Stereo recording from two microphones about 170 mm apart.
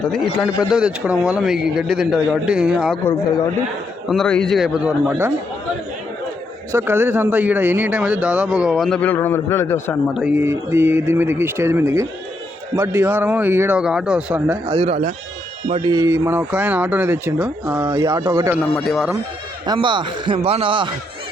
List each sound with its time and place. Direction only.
0.4 s a man's voice: 5° right (ahead or behind)
3.0 s speech: 15° left (ahead or behind)
4.1 s a man's voice: 5° left (ahead or behind)
6.7 s a man's voice: 15° right (ahead or behind); by 10.0 s 15° left (ahead or behind)
10.2 s a man's voice: 10° right (ahead or behind)
14.7 s a man's voice: 35° right (ahead or behind)
18.5 s a man's voice: centre (ahead or behind)
19.6 s a man's voice: 25° right (ahead or behind)